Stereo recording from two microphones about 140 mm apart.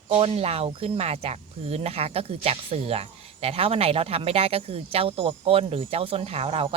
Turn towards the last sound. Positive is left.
turn(degrees=-45)  # may be behind; listen again after turning